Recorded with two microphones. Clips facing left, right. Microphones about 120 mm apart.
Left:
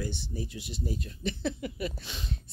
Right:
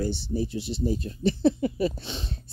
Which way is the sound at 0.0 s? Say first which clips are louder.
Right 8 dB; 30° right (ahead or behind).